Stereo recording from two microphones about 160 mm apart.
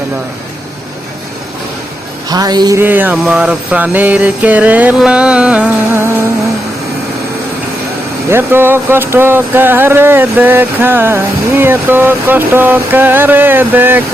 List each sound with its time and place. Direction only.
2.3 s speech: 25° right (ahead or behind)
2.8 s speech: 10° right (ahead or behind)
8.3 s speech: 15° right (ahead or behind)